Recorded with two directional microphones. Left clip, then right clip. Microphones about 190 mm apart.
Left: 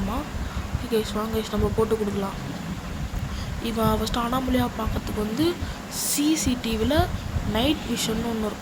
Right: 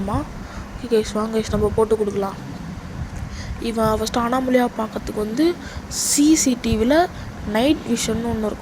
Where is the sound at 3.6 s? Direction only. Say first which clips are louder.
Right 5 dB; 25° right (ahead or behind).